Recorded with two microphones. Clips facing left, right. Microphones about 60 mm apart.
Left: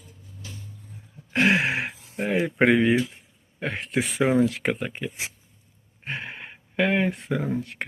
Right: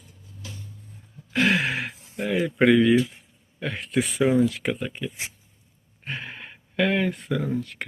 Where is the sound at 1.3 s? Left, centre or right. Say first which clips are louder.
Left 1 dB; left.